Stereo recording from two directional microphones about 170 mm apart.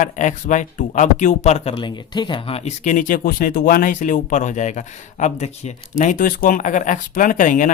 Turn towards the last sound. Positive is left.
turn(degrees=50)  # may be behind; listen again after turning